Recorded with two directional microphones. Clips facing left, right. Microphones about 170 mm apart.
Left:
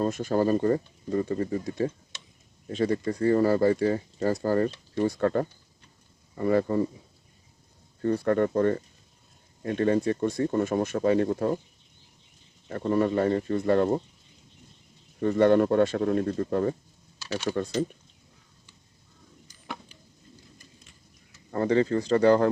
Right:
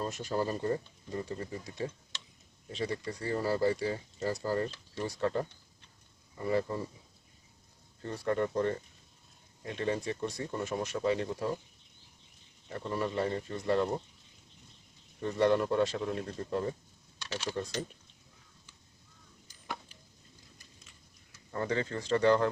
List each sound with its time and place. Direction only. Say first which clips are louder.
0.0 s speech: left 8 dB; 55° left (ahead or behind)
8.0 s speech: left 8 dB; 55° left (ahead or behind)
12.6 s speech: left 10 dB; 55° left (ahead or behind)
15.2 s speech: left 7 dB; 60° left (ahead or behind)
21.5 s speech: left 10 dB; 35° left (ahead or behind)